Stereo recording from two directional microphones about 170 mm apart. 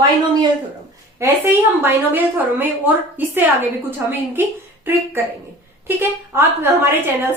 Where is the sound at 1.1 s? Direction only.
15° right (ahead or behind).